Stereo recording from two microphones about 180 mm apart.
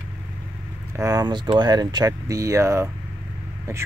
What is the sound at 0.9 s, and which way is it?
Speech, 20° right (ahead or behind).